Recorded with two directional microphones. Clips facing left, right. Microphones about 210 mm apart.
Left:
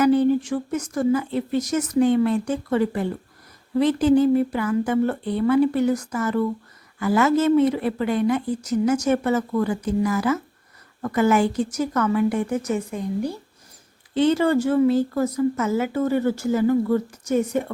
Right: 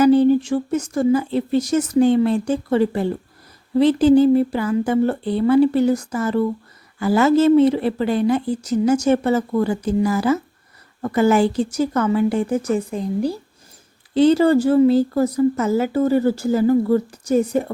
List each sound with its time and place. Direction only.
0.0 s a woman's voice: 30° right (ahead or behind)